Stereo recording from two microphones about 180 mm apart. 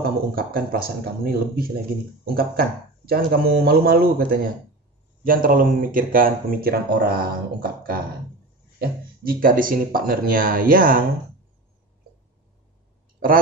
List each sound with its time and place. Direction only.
0.0 s speech: 55° right (ahead or behind)
5.2 s speech: 50° right (ahead or behind)